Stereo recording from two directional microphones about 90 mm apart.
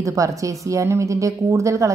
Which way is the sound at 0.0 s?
35° right (ahead or behind).